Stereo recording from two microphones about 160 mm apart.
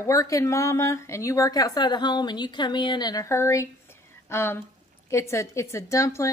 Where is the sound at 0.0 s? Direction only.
20° left (ahead or behind).